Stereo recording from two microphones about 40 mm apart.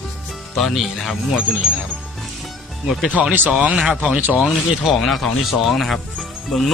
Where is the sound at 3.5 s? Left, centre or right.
Right.